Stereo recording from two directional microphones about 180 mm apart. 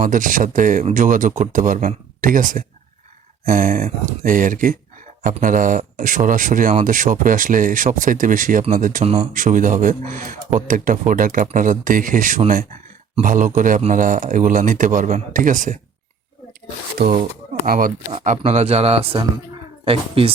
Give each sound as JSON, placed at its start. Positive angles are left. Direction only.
{"t": 0.0, "sound": "speech", "side_deg": -50}
{"t": 17.0, "sound": "speech", "side_deg": -50}
{"t": 18.1, "sound": "speech", "side_deg": -40}